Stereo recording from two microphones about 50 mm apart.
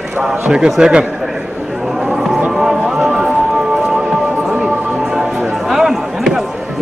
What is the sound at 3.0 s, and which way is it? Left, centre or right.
Music, centre.